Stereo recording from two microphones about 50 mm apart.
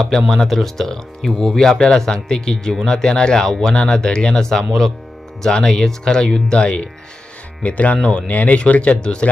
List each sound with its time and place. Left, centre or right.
0.3 s speech: centre; by 9.3 s left